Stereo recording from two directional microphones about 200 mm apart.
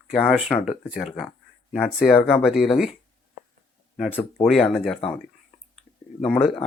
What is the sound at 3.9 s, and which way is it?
Speech, centre (ahead or behind).